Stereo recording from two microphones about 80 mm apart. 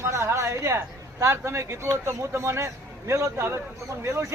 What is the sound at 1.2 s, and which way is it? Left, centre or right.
A man's voice, right.